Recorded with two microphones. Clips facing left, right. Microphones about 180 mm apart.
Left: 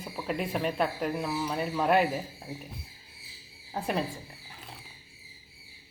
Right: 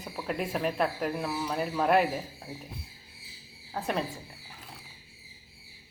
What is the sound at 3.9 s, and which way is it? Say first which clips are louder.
Speech: left 1 dB; centre (ahead or behind).